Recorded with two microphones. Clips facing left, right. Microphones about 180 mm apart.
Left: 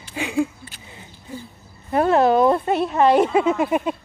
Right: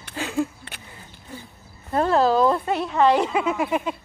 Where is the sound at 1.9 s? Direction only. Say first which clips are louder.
Left 3 dB; 15° left (ahead or behind).